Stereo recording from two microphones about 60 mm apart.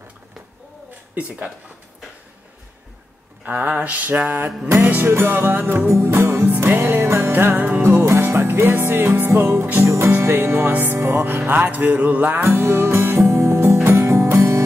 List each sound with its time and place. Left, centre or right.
3.4 s a sound: right
4.6 s music: right
5.9 s music: right
12.4 s music: right